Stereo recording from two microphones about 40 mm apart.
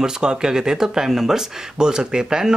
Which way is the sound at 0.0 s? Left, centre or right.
Centre.